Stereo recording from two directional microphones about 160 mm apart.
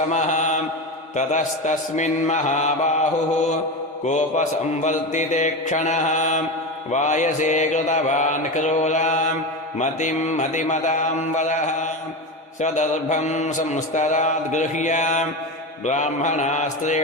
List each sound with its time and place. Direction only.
0.1 s mantra: 50° left (ahead or behind)
4.0 s mantra: 45° left (ahead or behind)